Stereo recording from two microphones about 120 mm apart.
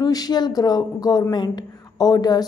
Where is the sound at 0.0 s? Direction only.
35° left (ahead or behind).